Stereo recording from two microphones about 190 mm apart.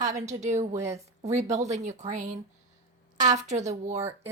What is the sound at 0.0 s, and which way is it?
Speech, 40° right (ahead or behind).